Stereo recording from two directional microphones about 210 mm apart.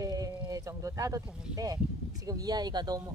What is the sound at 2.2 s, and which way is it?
Speech, 15° right (ahead or behind).